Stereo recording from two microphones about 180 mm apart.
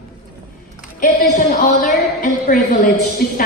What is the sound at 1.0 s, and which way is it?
Speech, 45° left (ahead or behind).